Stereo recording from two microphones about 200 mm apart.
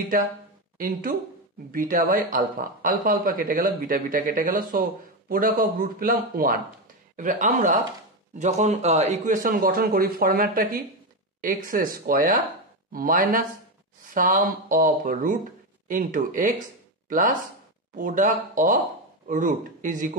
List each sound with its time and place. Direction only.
0.7 s speech: 45° right (ahead or behind)